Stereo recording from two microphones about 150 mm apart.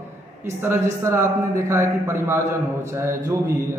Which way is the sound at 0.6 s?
15° right (ahead or behind).